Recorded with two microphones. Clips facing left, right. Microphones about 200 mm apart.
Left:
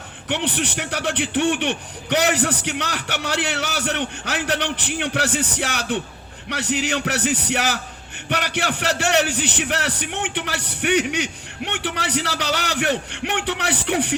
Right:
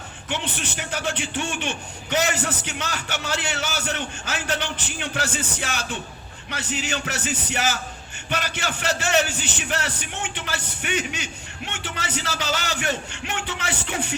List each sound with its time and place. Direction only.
0.3 s a man's voice: 70° left (ahead or behind)